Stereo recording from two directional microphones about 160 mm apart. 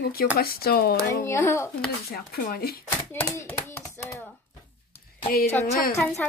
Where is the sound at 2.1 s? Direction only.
65° left (ahead or behind).